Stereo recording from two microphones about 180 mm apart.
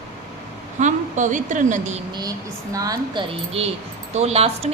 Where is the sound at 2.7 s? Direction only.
20° right (ahead or behind).